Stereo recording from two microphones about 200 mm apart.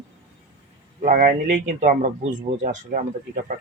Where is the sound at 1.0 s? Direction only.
45° right (ahead or behind).